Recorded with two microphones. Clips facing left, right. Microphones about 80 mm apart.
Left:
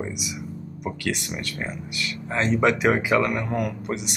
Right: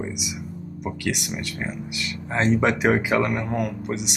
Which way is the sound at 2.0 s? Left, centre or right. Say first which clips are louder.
Right 1 dB; right.